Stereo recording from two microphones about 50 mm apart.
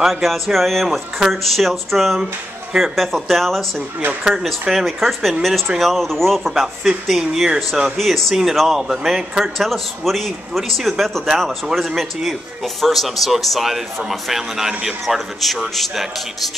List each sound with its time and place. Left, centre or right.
0.0 s a man's voice: centre
4.2 s a man's voice: centre
8.0 s a man's voice: centre
14.7 s speech: centre
15.0 s a man's voice: centre